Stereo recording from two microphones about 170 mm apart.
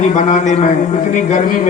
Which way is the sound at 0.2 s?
45° left (ahead or behind).